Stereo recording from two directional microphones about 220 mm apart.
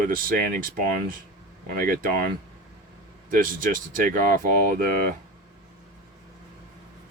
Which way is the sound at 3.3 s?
40° right (ahead or behind).